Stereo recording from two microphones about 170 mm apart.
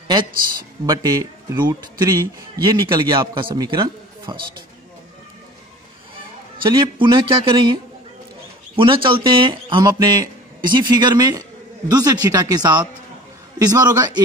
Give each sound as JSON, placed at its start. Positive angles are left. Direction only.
{"t": 0.8, "sound": "a man's voice", "side_deg": -25}
{"t": 6.6, "sound": "a man's voice", "side_deg": -30}